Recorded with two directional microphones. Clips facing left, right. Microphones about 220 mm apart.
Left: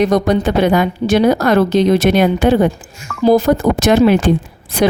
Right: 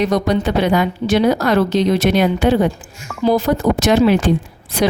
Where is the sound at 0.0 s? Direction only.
50° left (ahead or behind).